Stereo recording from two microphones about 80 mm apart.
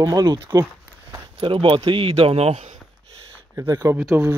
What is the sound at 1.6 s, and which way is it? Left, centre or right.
Speech, right.